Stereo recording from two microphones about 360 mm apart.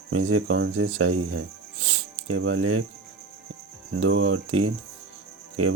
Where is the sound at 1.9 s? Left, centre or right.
Right.